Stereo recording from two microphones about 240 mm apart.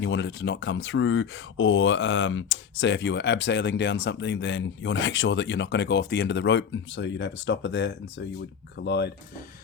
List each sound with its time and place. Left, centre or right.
0.0 s speech: left